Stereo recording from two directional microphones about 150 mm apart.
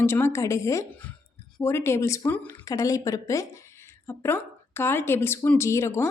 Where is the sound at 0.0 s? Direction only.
15° left (ahead or behind).